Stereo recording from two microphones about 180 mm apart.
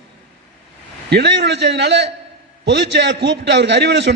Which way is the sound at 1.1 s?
75° right (ahead or behind).